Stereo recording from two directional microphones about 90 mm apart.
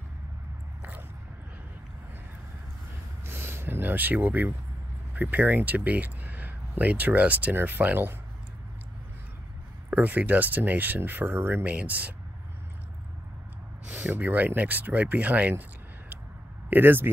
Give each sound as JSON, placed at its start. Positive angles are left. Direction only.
{"t": 3.3, "sound": "speech", "side_deg": -25}
{"t": 9.8, "sound": "speech", "side_deg": -15}
{"t": 13.8, "sound": "speech", "side_deg": -15}
{"t": 16.7, "sound": "speech", "side_deg": -20}